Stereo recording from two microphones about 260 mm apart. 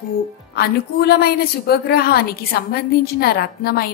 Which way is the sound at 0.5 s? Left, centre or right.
Left.